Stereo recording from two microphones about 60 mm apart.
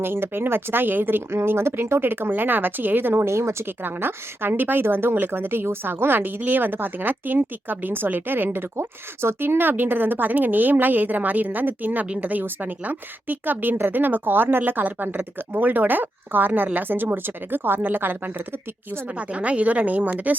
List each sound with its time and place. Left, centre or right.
0.0 s speech: right
12.0 s speech: centre
12.3 s speech: right
19.0 s speech: right